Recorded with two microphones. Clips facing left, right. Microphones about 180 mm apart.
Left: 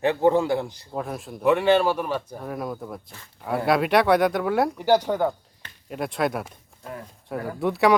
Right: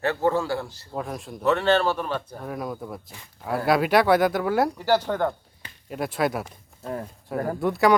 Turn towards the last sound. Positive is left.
turn(degrees=0)  # may be behind; listen again after turning